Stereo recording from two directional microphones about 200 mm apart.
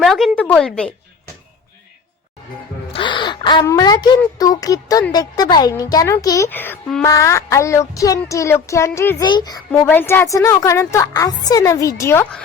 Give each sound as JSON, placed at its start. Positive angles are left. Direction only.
{"t": 0.0, "sound": "speech", "side_deg": 0}
{"t": 2.9, "sound": "speech", "side_deg": 25}